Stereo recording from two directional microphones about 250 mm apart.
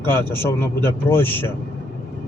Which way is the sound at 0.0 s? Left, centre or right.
Centre.